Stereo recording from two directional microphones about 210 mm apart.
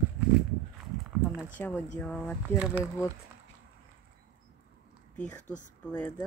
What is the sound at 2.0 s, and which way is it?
Speech, 5° left (ahead or behind).